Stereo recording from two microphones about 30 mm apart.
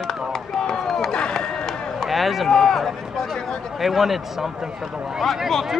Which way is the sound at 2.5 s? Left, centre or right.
Centre.